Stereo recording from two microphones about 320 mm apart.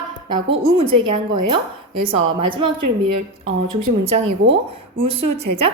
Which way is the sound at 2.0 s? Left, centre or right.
Centre.